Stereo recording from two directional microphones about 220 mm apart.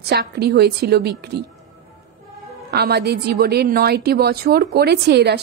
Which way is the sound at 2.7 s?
45° right (ahead or behind).